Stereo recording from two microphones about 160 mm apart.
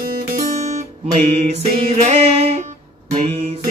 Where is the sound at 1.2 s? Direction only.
40° right (ahead or behind).